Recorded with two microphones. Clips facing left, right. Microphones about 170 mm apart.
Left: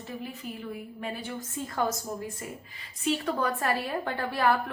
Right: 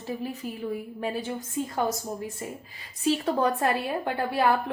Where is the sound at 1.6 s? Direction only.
20° right (ahead or behind).